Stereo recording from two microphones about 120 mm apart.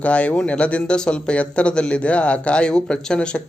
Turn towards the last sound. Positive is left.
turn(degrees=10)  # may be behind; listen again after turning